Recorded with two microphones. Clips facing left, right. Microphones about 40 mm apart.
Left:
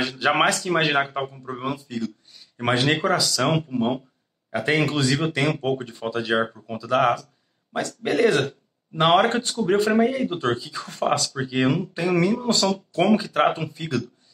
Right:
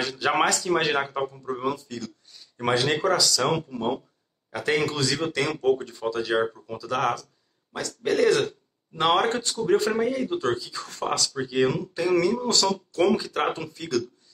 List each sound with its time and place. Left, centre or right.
0.0 s speech: left
2.7 s speech: left
3.2 s speech: centre